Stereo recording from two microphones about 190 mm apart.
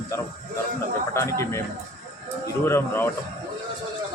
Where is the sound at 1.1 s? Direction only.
15° left (ahead or behind).